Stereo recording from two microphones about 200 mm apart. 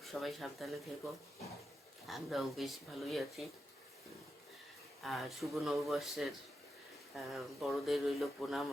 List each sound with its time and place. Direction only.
0.0 s speech: centre (ahead or behind)
2.0 s speech: centre (ahead or behind)
5.0 s speech: centre (ahead or behind)